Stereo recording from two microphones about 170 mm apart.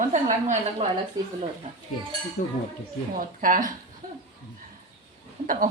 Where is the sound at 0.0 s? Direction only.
45° right (ahead or behind).